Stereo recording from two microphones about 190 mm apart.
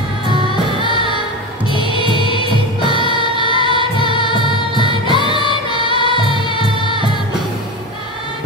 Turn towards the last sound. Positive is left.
turn(degrees=25)  # may be behind; listen again after turning